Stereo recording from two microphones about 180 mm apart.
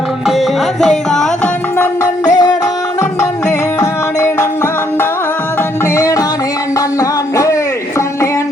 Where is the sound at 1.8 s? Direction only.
20° left (ahead or behind).